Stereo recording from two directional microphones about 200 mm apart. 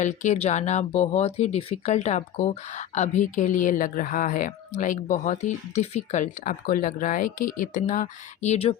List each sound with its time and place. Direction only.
0.0 s speech: 35° left (ahead or behind)